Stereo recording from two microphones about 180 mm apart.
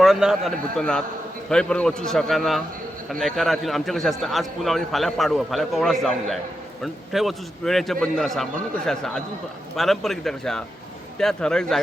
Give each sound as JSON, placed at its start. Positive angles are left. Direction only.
{"t": 0.0, "sound": "a man's voice", "side_deg": 0}
{"t": 9.7, "sound": "a man's voice", "side_deg": 0}